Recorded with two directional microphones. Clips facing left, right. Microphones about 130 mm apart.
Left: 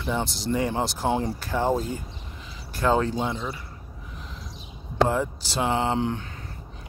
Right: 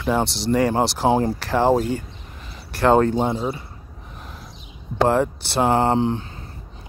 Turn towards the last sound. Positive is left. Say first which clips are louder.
# right 6 dB
turn(degrees=-30)  # may be behind; listen again after turning